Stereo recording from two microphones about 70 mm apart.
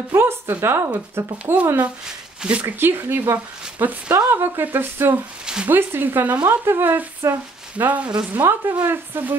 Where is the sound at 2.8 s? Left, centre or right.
Right.